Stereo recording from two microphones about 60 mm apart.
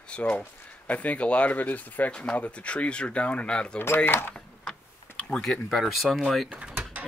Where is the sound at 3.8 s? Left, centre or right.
Left.